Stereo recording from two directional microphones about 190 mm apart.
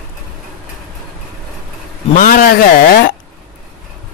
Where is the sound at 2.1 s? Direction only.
45° left (ahead or behind).